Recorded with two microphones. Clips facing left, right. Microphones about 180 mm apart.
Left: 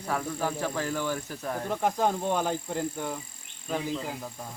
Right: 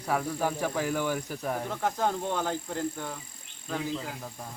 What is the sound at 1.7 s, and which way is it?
Speech, 15° left (ahead or behind).